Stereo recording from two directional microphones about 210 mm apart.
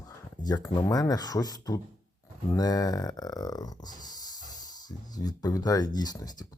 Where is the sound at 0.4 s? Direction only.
20° left (ahead or behind).